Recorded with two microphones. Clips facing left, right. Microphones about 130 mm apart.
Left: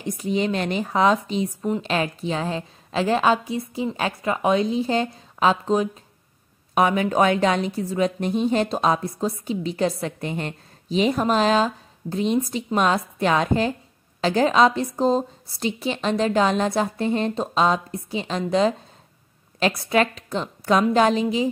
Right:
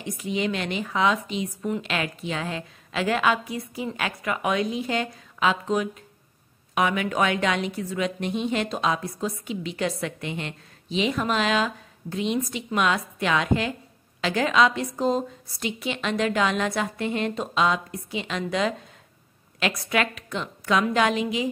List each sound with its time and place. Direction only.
0.0 s a woman's voice: 35° left (ahead or behind)